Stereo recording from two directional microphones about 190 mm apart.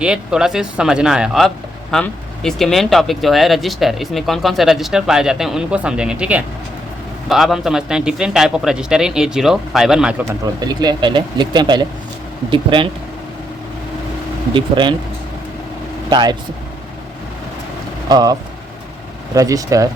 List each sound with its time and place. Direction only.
0.0 s speech: 5° right (ahead or behind)
10.4 s speech: 20° right (ahead or behind)
14.5 s speech: 25° right (ahead or behind)
16.0 s speech: 20° right (ahead or behind)
18.1 s speech: 20° right (ahead or behind)